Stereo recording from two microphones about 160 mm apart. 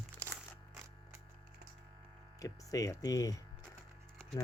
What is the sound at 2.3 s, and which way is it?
Speech, 20° left (ahead or behind).